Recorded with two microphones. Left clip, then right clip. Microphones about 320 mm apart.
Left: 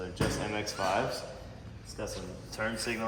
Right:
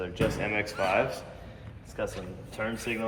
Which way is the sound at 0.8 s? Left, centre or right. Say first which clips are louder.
Right 3 dB; centre.